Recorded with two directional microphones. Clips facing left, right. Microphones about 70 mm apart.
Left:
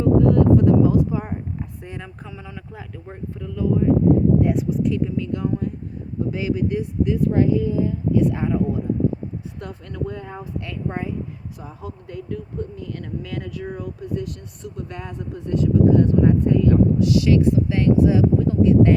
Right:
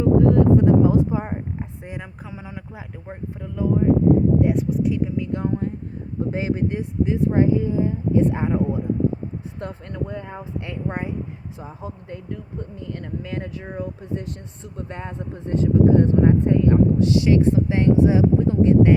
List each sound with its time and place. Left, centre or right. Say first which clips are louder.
0.0 s a sound: even; right
1.8 s speech: even; centre
4.4 s speech: even; centre
4.9 s speech: even; centre
5.4 s speech: even; right